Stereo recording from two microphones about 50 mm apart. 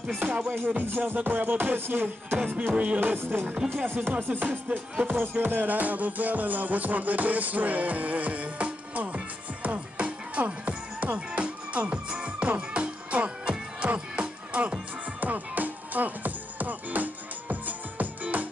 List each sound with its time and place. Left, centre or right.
0.2 s music: right
2.3 s music: right
3.0 s music: right
3.7 s speech: right
4.1 s music: right